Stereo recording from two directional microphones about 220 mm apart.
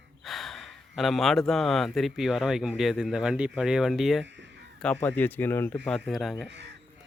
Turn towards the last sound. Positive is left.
turn(degrees=-55)  # may be behind; listen again after turning